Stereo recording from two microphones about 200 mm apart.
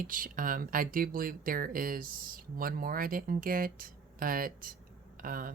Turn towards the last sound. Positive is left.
turn(degrees=-45)  # may be behind; listen again after turning